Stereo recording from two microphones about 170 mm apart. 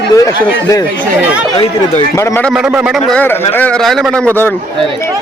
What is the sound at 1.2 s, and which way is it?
Speech, 10° right (ahead or behind).